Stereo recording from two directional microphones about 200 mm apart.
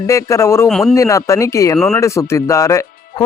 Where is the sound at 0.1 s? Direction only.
15° left (ahead or behind).